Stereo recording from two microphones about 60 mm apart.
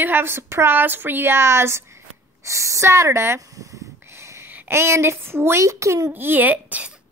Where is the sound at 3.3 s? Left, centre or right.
Right.